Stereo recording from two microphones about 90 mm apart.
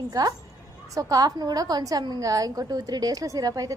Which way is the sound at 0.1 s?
45° right (ahead or behind).